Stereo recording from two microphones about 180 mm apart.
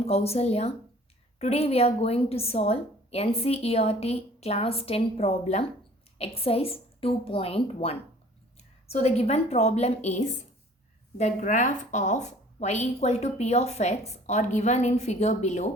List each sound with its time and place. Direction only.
0.0 s a woman's voice: 35° left (ahead or behind)